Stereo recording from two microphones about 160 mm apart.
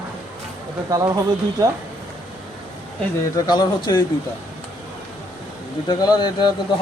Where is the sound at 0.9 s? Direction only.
20° right (ahead or behind).